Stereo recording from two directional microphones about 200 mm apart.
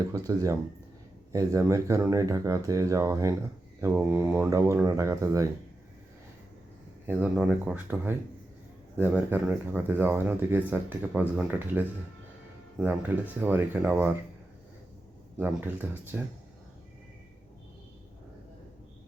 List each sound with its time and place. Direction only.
0.1 s speech: 15° right (ahead or behind)
7.1 s speech: 5° right (ahead or behind)
12.8 s speech: 10° right (ahead or behind)
15.4 s speech: 10° right (ahead or behind)